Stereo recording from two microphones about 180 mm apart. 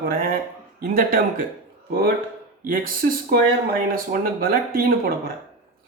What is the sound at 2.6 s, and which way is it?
Speech, 50° right (ahead or behind).